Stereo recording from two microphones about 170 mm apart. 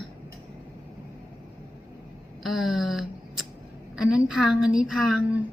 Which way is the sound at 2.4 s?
Centre (ahead or behind).